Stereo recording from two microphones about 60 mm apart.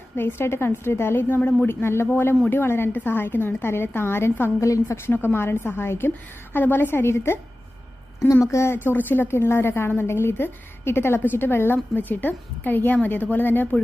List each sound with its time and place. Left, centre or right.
0.2 s a woman's voice: left
4.6 s a woman's voice: left
5.0 s a woman's voice: left
8.2 s a woman's voice: left
8.7 s a woman's voice: left